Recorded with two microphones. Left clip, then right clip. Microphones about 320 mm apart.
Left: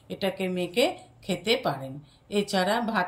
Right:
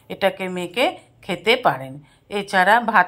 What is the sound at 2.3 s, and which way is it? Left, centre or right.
Speech, centre.